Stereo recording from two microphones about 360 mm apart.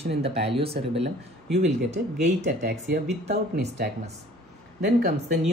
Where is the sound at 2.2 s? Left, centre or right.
Right.